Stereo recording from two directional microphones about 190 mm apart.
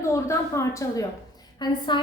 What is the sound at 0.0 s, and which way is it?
A woman's voice, 15° left (ahead or behind).